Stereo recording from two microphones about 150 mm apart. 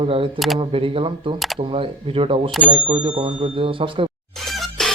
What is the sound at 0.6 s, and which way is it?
A man's voice, 35° right (ahead or behind).